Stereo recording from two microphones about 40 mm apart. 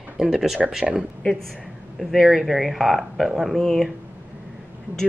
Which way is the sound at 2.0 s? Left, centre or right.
Centre.